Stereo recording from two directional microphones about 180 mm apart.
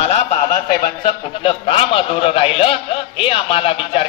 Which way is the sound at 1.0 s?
30° left (ahead or behind).